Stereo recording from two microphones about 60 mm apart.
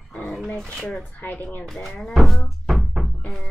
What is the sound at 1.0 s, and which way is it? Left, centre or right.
Speech, left.